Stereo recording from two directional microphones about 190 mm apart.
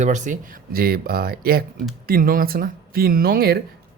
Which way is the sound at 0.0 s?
40° right (ahead or behind).